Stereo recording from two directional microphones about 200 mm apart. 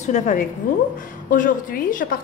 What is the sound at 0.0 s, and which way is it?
A woman's voice, 40° left (ahead or behind).